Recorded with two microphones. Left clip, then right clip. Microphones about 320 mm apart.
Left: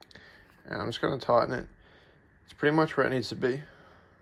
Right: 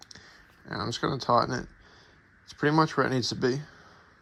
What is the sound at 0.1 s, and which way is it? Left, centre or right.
Computer keyboard, centre.